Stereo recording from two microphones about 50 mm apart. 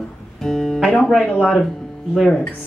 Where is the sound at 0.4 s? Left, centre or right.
Centre.